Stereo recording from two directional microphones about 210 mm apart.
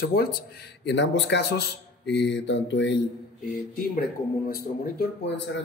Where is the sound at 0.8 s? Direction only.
55° left (ahead or behind).